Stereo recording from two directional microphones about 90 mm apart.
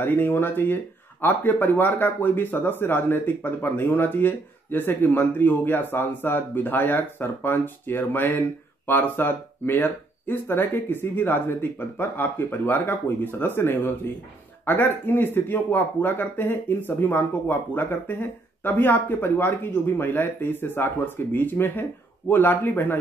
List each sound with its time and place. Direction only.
0.0 s speech: 25° left (ahead or behind)